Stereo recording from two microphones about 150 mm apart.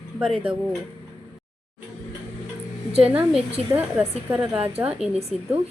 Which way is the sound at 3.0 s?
10° right (ahead or behind).